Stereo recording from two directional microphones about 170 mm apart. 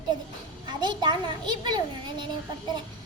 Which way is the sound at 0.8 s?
25° right (ahead or behind).